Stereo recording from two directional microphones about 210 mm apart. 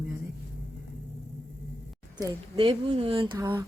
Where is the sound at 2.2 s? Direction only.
25° right (ahead or behind).